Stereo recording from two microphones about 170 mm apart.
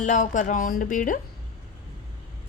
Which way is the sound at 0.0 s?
50° left (ahead or behind).